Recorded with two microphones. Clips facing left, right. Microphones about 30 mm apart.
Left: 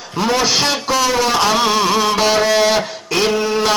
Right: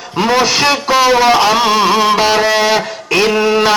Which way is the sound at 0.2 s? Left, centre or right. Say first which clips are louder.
Right 4 dB; right.